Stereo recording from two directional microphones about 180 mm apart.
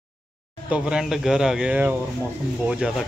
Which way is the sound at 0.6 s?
5° right (ahead or behind).